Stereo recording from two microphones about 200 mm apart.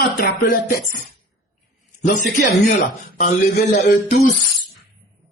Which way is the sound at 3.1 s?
40° left (ahead or behind).